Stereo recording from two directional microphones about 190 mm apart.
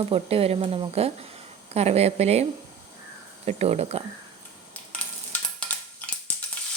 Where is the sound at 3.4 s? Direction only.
35° right (ahead or behind).